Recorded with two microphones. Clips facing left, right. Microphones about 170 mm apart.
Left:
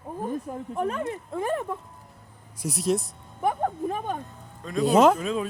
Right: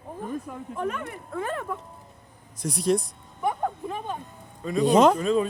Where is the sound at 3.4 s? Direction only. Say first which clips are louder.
Left 2 dB; 45° left (ahead or behind).